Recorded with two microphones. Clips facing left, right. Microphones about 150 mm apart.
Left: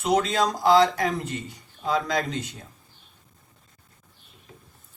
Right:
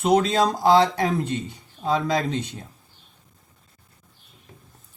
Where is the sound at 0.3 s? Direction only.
30° right (ahead or behind).